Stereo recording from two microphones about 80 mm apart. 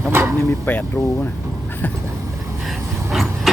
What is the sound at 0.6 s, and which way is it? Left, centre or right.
Speech, left.